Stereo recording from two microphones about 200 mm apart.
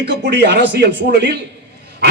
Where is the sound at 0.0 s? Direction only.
55° right (ahead or behind).